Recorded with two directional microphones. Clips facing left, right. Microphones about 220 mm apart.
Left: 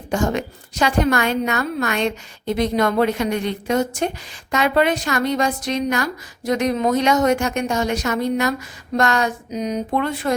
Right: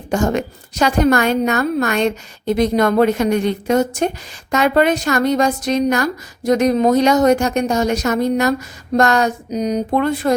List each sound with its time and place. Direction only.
0.1 s a woman's voice: 45° right (ahead or behind)